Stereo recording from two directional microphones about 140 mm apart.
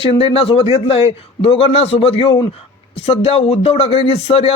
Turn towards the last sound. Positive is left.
turn(degrees=45)  # may be behind; listen again after turning